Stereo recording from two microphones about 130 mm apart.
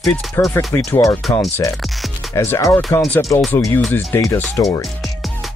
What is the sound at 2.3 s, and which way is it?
Speech, 20° left (ahead or behind).